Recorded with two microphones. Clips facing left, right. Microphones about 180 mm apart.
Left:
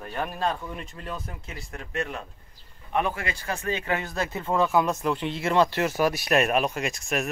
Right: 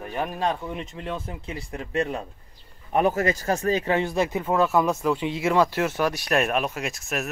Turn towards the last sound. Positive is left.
turn(degrees=0)  # may be behind; listen again after turning